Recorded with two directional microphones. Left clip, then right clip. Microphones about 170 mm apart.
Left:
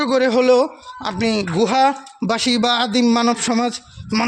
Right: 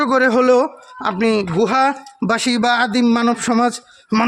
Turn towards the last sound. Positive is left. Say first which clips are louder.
# right 3 dB
turn(degrees=-10)  # may be behind; listen again after turning